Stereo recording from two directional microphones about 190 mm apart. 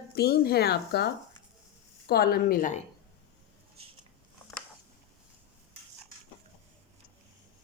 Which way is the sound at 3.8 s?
30° right (ahead or behind).